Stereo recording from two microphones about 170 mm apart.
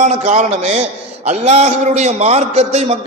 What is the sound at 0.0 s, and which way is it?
A man's voice, 45° right (ahead or behind).